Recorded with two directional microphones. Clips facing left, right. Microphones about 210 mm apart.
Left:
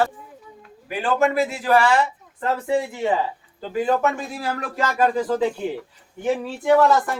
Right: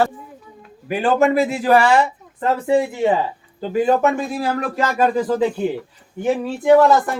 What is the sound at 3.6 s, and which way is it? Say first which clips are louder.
Speech: right 4 dB; 20° right (ahead or behind).